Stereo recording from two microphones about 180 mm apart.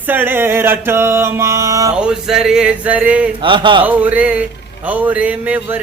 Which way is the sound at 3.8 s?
10° right (ahead or behind).